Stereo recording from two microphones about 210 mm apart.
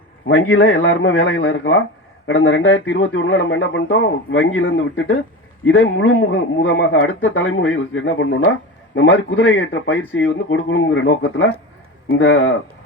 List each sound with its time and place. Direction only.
0.3 s speech: 65° left (ahead or behind)